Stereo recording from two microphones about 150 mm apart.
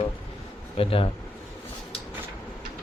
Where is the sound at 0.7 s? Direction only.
35° left (ahead or behind).